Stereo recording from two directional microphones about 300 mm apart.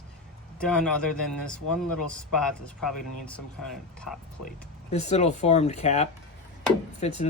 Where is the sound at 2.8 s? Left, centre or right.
Centre.